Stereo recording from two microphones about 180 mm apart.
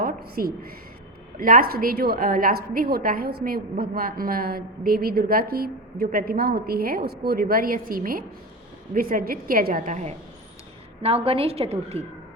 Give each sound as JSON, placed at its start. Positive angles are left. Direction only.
{"t": 0.0, "sound": "a woman's voice", "side_deg": -55}